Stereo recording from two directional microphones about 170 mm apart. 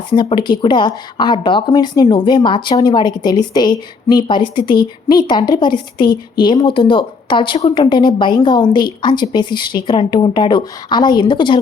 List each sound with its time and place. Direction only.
0.1 s speech: 30° left (ahead or behind)